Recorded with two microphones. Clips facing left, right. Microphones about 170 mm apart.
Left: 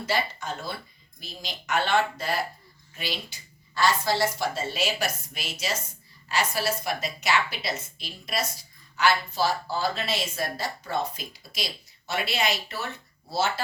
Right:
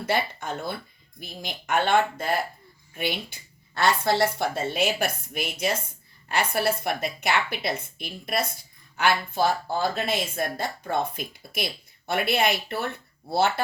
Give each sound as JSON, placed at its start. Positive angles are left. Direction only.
{"t": 0.0, "sound": "a woman's voice", "side_deg": -55}